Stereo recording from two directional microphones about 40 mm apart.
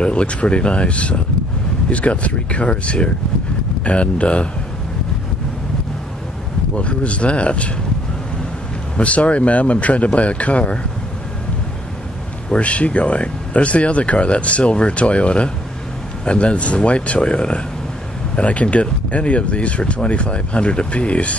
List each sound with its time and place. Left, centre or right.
0.0 s speech: left
6.7 s speech: left
8.9 s speech: left
12.4 s speech: left